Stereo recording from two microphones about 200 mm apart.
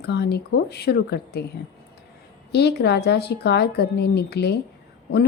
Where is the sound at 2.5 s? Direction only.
55° left (ahead or behind).